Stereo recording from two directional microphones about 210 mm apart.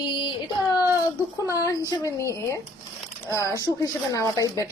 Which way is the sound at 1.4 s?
15° left (ahead or behind).